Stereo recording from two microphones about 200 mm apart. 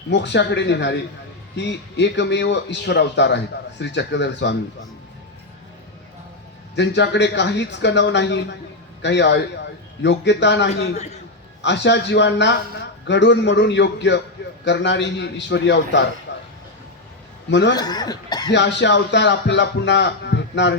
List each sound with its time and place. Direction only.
0.1 s a man's voice: 60° left (ahead or behind)
6.7 s a man's voice: 60° left (ahead or behind)
10.9 s a man's voice: 35° left (ahead or behind)
11.6 s a man's voice: 60° left (ahead or behind)
16.3 s a sound: 60° left (ahead or behind)
17.5 s a man's voice: 60° left (ahead or behind)
17.7 s speech: 20° left (ahead or behind)
18.5 s a man's voice: 60° left (ahead or behind)